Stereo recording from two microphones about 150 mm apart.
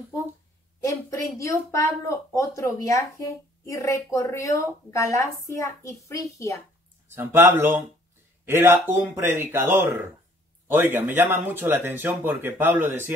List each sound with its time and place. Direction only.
0.8 s a child's voice: 20° left (ahead or behind)
7.1 s speech: 15° right (ahead or behind)